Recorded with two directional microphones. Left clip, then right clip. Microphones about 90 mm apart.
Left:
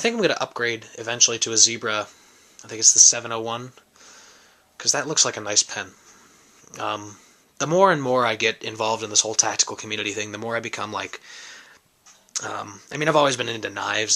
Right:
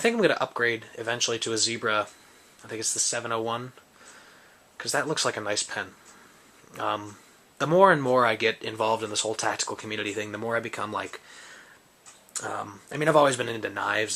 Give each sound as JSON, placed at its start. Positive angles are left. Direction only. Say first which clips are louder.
{"t": 0.0, "sound": "speech", "louder": "left 1 dB", "side_deg": 40}
{"t": 4.8, "sound": "speech", "louder": "left 5 dB", "side_deg": 35}
{"t": 12.6, "sound": "speech", "louder": "left 2 dB", "side_deg": 30}